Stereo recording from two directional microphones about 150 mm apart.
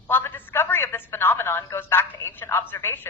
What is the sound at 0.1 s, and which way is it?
Speech, 15° left (ahead or behind).